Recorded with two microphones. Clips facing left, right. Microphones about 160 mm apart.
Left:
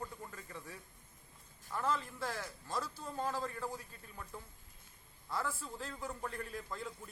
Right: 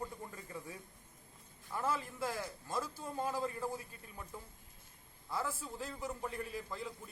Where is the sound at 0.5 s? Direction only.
25° right (ahead or behind).